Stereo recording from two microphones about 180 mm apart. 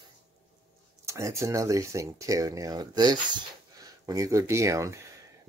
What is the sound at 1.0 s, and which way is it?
Speech, 15° right (ahead or behind).